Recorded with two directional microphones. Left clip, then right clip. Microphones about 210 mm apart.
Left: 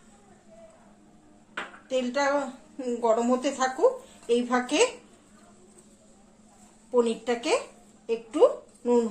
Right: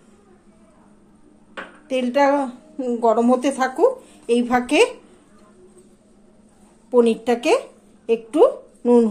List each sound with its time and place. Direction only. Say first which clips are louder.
1.9 s a woman's voice: right 8 dB; 50° right (ahead or behind)
2.8 s a woman's voice: right 7 dB; 35° right (ahead or behind)
6.9 s a woman's voice: right 8 dB; 50° right (ahead or behind)